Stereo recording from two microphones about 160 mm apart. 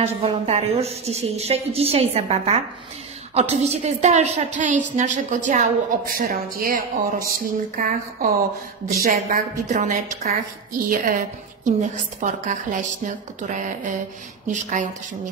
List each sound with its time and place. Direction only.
0.0 s a woman's voice: 40° right (ahead or behind)